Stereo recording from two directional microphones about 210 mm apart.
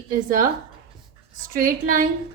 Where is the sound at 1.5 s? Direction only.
40° right (ahead or behind).